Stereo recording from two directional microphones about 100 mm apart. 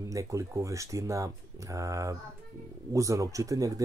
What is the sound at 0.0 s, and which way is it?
Speech, 30° right (ahead or behind).